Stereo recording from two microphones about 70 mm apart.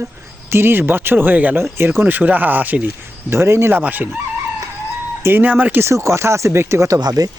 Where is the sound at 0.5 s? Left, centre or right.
Right.